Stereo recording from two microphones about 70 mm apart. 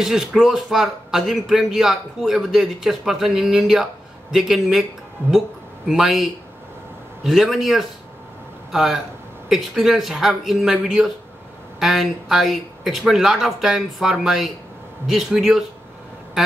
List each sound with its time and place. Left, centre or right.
0.0 s speech: centre
5.2 s speech: right
5.9 s speech: centre